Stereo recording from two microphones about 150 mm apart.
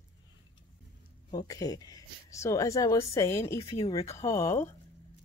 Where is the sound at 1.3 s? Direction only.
25° left (ahead or behind).